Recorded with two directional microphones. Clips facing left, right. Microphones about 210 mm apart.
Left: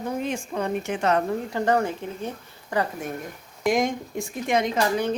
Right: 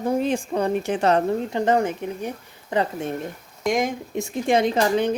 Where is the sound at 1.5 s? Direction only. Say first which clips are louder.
Even; 20° right (ahead or behind).